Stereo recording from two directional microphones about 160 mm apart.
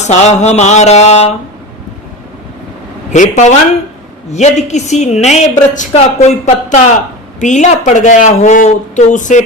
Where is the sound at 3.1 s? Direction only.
50° left (ahead or behind).